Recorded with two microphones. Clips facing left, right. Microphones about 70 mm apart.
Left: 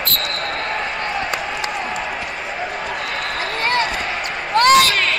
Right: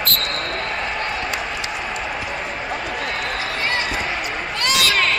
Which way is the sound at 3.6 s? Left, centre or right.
Left.